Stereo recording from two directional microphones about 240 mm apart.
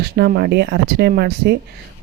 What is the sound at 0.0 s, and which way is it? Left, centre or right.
Speech, right.